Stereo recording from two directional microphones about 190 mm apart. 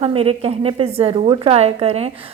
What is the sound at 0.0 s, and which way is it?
A woman's voice, 30° right (ahead or behind).